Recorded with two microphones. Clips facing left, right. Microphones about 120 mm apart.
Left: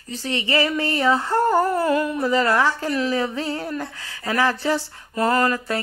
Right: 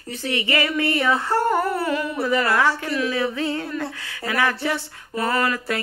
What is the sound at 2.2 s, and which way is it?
A woman's voice, 30° left (ahead or behind).